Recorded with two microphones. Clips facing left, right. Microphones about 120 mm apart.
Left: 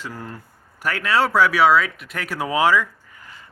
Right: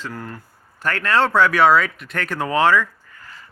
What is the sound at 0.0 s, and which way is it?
Speech, 15° left (ahead or behind).